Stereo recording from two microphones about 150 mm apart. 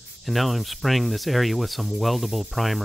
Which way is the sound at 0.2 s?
Centre (ahead or behind).